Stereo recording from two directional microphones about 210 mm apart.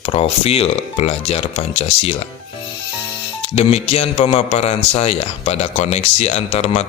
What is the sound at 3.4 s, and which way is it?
A man's voice, 30° left (ahead or behind).